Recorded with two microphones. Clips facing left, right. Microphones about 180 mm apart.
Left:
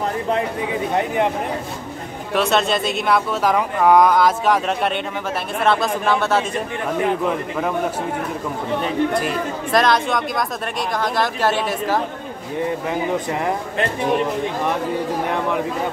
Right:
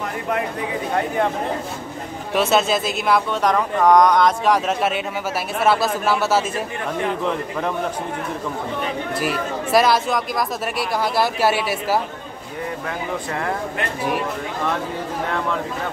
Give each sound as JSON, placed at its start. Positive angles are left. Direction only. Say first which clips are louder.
{"t": 0.9, "sound": "speech", "louder": "left 1 dB", "side_deg": 20}
{"t": 2.3, "sound": "speech", "louder": "even", "side_deg": 0}
{"t": 9.1, "sound": "speech", "louder": "left 1 dB", "side_deg": -5}
{"t": 13.3, "sound": "speech", "louder": "left 3 dB", "side_deg": 20}